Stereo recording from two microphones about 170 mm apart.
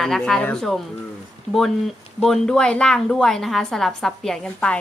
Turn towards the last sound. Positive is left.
turn(degrees=5)  # may be behind; listen again after turning